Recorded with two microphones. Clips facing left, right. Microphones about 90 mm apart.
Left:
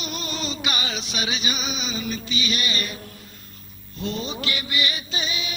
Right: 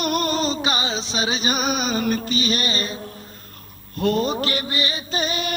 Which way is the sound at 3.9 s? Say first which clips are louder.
Right 9 dB; 55° right (ahead or behind).